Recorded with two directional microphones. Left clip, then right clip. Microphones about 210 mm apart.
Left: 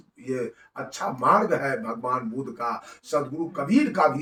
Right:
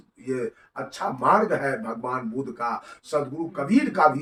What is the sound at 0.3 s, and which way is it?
Speech, 10° right (ahead or behind).